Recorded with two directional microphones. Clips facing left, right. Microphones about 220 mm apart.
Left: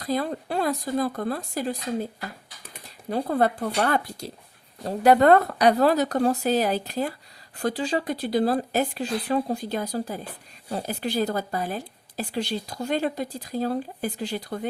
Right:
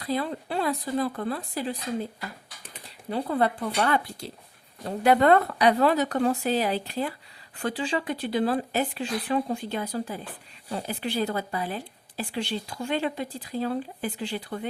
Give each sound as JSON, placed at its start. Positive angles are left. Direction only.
{"t": 0.0, "sound": "speech", "side_deg": 40}